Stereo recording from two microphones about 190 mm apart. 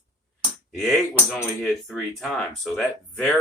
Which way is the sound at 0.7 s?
Centre (ahead or behind).